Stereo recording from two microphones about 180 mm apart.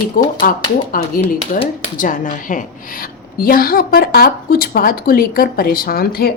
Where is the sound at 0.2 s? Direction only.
50° left (ahead or behind).